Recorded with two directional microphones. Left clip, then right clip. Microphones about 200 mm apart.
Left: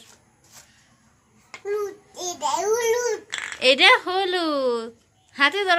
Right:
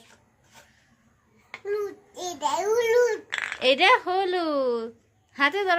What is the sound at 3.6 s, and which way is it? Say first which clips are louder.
A woman's voice: left 4 dB; centre (ahead or behind).